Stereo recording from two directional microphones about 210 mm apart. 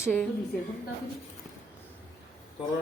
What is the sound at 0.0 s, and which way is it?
Speech, 5° left (ahead or behind).